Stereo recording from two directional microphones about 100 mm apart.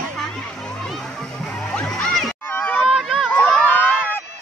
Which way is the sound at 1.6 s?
5° left (ahead or behind).